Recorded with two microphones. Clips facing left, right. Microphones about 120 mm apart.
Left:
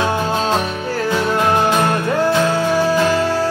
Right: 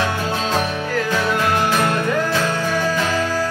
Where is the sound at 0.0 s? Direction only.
25° left (ahead or behind).